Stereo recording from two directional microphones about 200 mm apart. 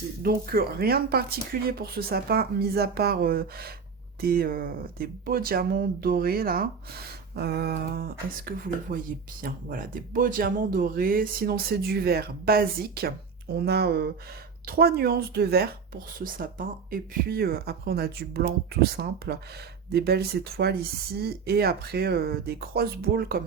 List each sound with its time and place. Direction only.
0.2 s speech: 50° right (ahead or behind)